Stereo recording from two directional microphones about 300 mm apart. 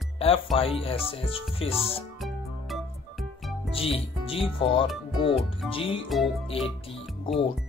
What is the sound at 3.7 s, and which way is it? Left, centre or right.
Speech, centre.